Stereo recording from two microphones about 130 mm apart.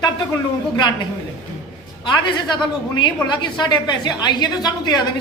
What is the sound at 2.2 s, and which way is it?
A woman's voice, 35° left (ahead or behind).